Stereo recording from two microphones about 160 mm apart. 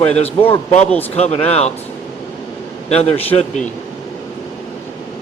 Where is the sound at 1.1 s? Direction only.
40° left (ahead or behind).